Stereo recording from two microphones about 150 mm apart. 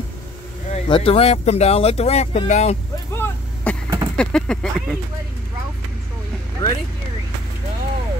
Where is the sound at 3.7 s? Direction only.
10° left (ahead or behind).